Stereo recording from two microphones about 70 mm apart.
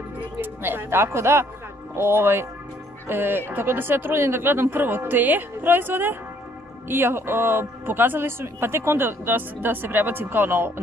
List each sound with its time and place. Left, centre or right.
0.4 s a man's voice: right